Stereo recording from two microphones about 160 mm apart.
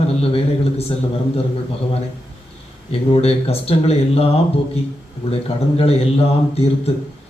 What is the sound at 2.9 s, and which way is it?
Speech, 40° left (ahead or behind).